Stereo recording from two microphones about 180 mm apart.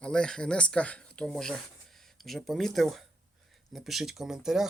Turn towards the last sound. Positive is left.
turn(degrees=-5)  # may be behind; listen again after turning